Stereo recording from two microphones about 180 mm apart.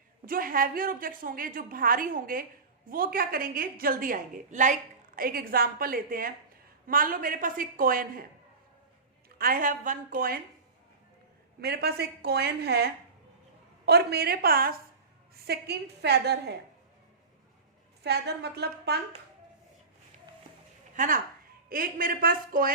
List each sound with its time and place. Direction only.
0.3 s a woman's voice: 50° right (ahead or behind)
9.4 s a woman's voice: 50° right (ahead or behind)
11.6 s a woman's voice: 60° right (ahead or behind)
18.0 s a woman's voice: 65° right (ahead or behind)
20.9 s a woman's voice: 45° right (ahead or behind)